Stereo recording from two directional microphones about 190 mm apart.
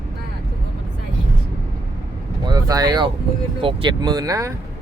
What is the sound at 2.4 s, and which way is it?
Speech, 20° right (ahead or behind).